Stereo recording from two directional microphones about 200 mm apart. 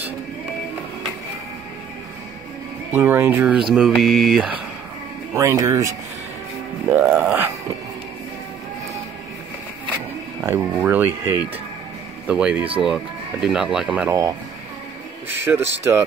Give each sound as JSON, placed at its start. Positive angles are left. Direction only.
{"t": 2.9, "sound": "speech", "side_deg": -10}
{"t": 5.3, "sound": "speech", "side_deg": -15}
{"t": 10.4, "sound": "speech", "side_deg": -10}
{"t": 15.2, "sound": "speech", "side_deg": -10}